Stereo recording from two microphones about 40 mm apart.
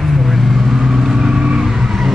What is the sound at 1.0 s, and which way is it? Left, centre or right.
Vehicle, centre.